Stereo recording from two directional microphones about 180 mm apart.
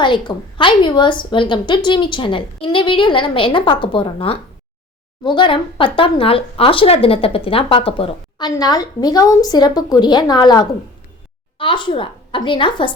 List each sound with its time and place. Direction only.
0.0 s a woman's voice: 25° left (ahead or behind)